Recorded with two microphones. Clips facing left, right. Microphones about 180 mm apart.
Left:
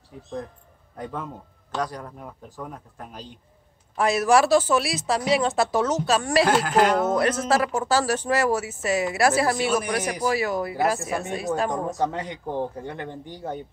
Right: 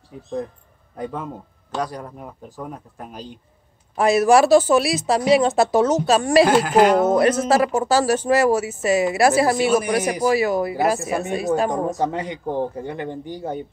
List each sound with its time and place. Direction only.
0.9 s speech: 10° right (ahead or behind)